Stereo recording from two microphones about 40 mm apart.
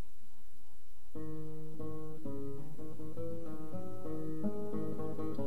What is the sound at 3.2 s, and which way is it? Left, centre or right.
Music, right.